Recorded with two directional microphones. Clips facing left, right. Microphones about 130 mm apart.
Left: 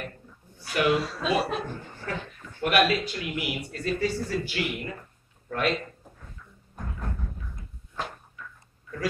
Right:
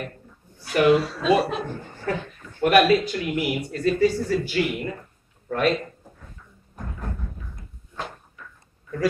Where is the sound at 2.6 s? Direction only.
40° right (ahead or behind).